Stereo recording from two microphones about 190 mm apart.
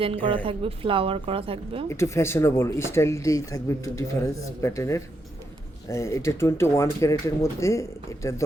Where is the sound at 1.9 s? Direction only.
15° left (ahead or behind).